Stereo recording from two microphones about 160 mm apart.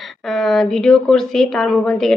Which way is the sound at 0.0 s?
Centre (ahead or behind).